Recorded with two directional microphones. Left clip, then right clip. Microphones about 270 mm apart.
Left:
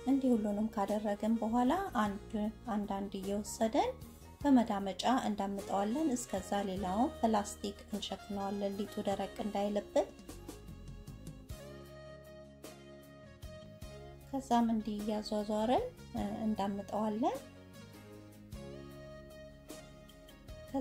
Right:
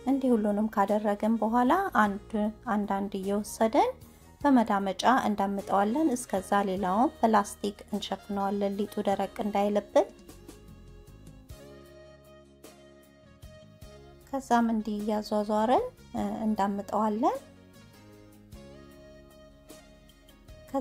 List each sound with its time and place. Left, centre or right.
0.0 s speech: right
11.2 s music: centre
14.3 s speech: right
18.6 s music: centre